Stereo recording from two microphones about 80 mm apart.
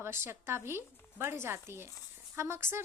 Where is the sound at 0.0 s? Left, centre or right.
Right.